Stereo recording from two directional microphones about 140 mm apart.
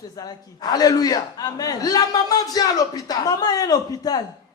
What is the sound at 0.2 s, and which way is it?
A man's voice, 30° left (ahead or behind).